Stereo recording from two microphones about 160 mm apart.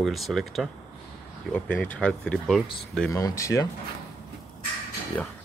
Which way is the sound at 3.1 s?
20° left (ahead or behind).